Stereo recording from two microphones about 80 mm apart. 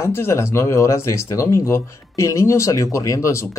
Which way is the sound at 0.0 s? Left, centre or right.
Left.